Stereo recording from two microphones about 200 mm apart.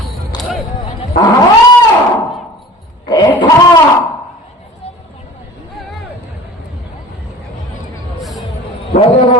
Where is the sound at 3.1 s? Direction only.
20° left (ahead or behind).